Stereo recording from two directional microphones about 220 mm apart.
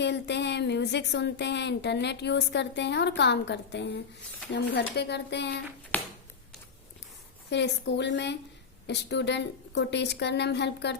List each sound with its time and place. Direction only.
0.0 s speech: 50° left (ahead or behind)
5.9 s a sound: 5° left (ahead or behind)
7.5 s speech: 50° left (ahead or behind)